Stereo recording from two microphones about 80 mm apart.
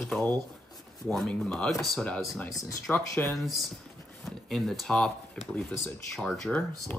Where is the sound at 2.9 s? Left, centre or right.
Left.